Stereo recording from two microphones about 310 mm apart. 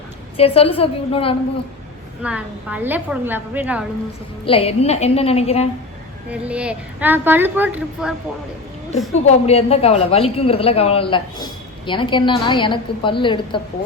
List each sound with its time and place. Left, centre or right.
0.3 s speech: centre
2.2 s a woman's voice: centre
4.4 s a woman's voice: centre
6.3 s a woman's voice: centre
9.2 s speech: centre